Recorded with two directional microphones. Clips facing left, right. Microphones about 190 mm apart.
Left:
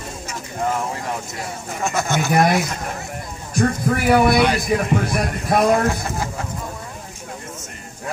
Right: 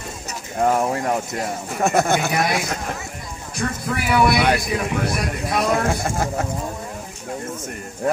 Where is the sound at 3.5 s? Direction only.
45° left (ahead or behind).